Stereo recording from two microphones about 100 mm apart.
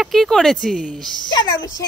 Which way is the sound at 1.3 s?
40° left (ahead or behind).